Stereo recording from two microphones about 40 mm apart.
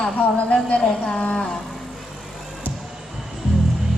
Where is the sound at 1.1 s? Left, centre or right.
Left.